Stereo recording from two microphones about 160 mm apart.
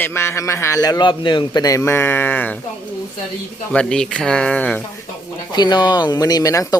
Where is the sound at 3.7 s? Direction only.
5° left (ahead or behind).